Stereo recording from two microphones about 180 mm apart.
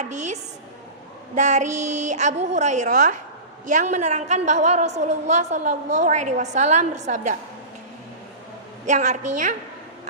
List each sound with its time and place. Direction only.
0.0 s a woman's voice: 40° right (ahead or behind)
1.4 s a woman's voice: 40° right (ahead or behind)
8.9 s a woman's voice: 40° right (ahead or behind)